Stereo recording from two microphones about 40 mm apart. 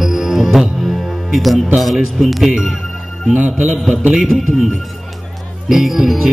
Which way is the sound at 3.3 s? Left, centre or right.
Right.